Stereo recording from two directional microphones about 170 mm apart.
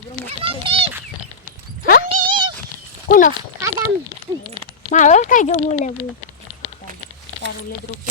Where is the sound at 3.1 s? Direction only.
55° left (ahead or behind).